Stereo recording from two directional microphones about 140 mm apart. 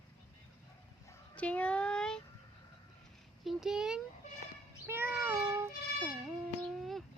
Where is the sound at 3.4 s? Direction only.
5° right (ahead or behind).